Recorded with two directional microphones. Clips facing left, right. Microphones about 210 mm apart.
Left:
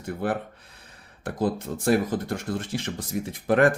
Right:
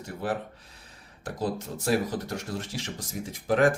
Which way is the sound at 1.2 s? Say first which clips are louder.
Left 4 dB; 55° left (ahead or behind).